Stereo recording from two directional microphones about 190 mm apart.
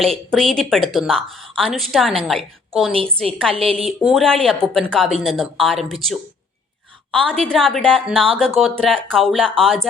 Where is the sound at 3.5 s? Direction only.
30° right (ahead or behind).